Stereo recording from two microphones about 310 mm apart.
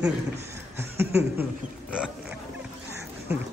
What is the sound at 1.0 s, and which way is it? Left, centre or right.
Chuckle, centre.